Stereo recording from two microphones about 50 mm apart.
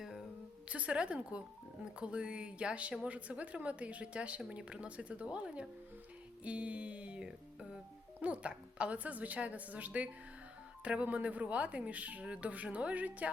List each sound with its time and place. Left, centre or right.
0.0 s a sound: centre
0.7 s a woman's voice: right
6.4 s music: right
8.2 s a woman's voice: right